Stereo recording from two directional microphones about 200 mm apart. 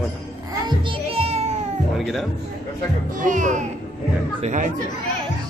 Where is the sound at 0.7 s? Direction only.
25° right (ahead or behind).